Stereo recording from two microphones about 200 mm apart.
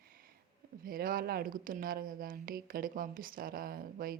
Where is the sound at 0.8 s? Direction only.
45° right (ahead or behind).